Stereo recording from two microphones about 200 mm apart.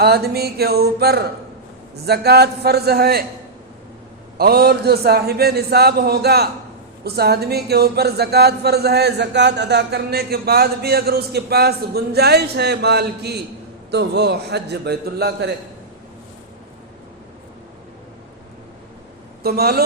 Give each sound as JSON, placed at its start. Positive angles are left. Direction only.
{"t": 0.0, "sound": "a man's voice", "side_deg": -50}
{"t": 4.4, "sound": "a man's voice", "side_deg": -50}
{"t": 19.4, "sound": "speech", "side_deg": -50}